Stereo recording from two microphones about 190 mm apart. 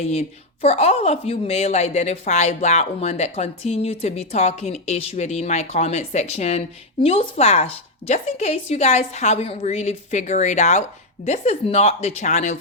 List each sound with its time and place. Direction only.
0.0 s a woman's voice: 35° left (ahead or behind)